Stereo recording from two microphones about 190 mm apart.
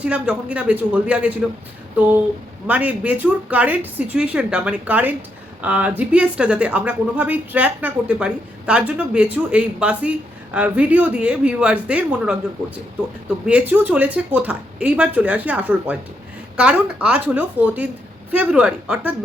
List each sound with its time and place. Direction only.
0.0 s a woman's voice: 5° right (ahead or behind)
13.4 s a woman's voice: 10° right (ahead or behind)